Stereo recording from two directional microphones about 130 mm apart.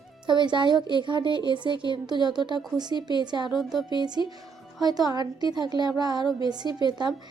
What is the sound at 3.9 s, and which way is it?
Speech, 35° right (ahead or behind).